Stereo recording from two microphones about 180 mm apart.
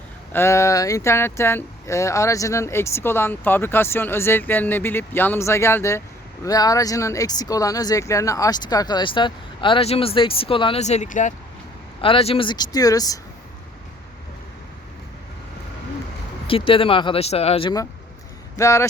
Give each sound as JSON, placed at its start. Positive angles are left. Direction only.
{"t": 0.3, "sound": "speech", "side_deg": 15}
{"t": 12.0, "sound": "speech", "side_deg": 30}
{"t": 16.5, "sound": "speech", "side_deg": 30}
{"t": 18.5, "sound": "speech", "side_deg": 15}